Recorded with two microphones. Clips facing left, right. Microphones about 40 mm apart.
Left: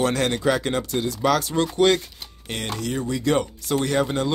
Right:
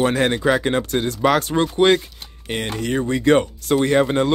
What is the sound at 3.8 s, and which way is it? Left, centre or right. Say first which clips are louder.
Speech: right 5 dB; right.